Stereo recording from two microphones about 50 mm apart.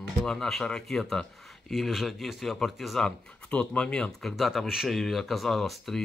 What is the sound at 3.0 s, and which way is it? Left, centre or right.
A man's voice, centre.